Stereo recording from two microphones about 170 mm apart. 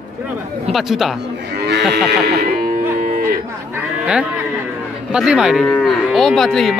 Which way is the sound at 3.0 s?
60° right (ahead or behind).